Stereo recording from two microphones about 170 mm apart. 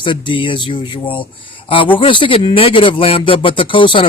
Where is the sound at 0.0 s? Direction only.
30° left (ahead or behind).